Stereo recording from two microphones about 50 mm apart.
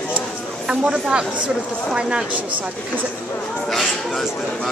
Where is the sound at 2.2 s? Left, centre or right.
Right.